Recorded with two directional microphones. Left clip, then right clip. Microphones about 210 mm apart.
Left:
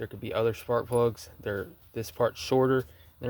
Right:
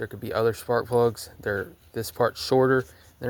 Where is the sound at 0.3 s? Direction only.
5° right (ahead or behind).